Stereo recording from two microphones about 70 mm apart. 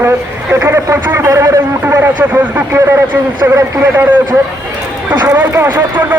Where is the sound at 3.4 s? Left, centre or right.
Right.